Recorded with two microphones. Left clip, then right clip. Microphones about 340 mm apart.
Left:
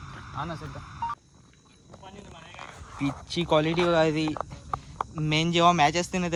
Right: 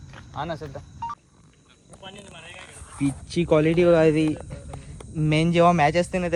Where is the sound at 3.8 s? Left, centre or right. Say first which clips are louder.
Right 5 dB; right.